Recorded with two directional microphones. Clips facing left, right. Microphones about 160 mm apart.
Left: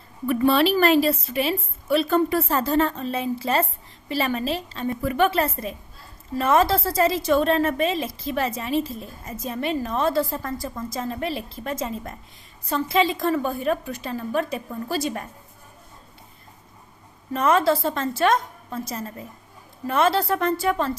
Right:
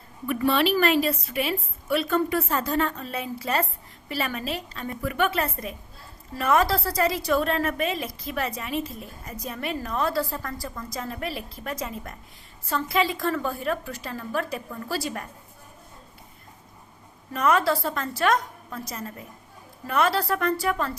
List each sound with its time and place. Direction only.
0.3 s a woman's voice: 35° left (ahead or behind)
17.3 s a woman's voice: 25° left (ahead or behind)